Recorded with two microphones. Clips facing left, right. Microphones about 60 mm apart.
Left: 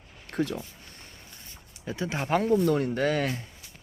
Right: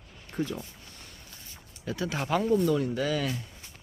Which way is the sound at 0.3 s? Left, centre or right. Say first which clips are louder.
Left 3 dB; left.